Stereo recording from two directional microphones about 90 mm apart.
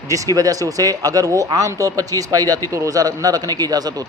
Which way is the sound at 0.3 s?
40° right (ahead or behind).